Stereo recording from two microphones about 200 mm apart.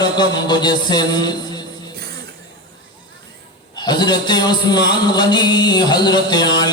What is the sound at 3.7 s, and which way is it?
A man's voice, 20° left (ahead or behind).